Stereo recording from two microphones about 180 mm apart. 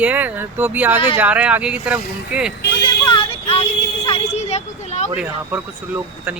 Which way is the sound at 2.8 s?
25° left (ahead or behind).